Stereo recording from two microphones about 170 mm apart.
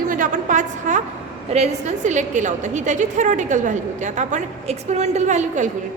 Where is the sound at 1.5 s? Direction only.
40° right (ahead or behind).